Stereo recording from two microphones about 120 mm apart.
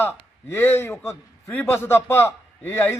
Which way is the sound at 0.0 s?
20° left (ahead or behind).